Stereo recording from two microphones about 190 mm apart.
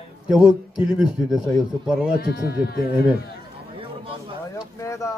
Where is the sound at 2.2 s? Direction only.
55° left (ahead or behind).